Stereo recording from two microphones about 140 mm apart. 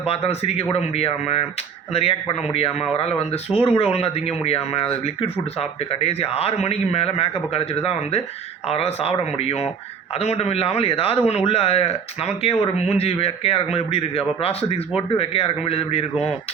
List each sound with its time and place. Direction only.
0.0 s speech: 45° left (ahead or behind)